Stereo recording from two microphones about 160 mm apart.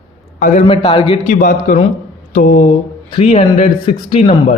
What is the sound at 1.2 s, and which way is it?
A man's voice, 50° left (ahead or behind).